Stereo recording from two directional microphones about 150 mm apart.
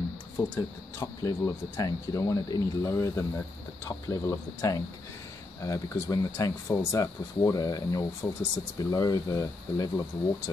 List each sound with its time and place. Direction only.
0.4 s speech: 20° left (ahead or behind)